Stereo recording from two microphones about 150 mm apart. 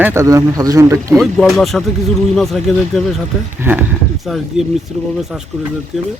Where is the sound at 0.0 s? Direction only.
20° right (ahead or behind).